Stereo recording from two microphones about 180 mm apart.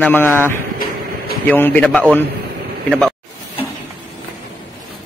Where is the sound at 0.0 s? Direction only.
10° left (ahead or behind).